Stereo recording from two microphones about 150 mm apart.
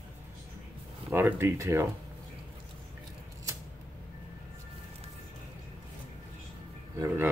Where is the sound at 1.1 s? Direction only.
15° right (ahead or behind).